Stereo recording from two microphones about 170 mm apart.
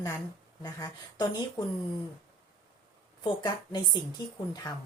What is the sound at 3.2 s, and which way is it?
Speech, 25° left (ahead or behind).